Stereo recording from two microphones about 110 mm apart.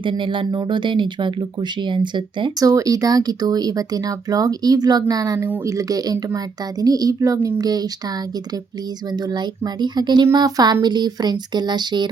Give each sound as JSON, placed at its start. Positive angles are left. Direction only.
{"t": 0.0, "sound": "speech", "side_deg": -50}
{"t": 9.1, "sound": "speech", "side_deg": -40}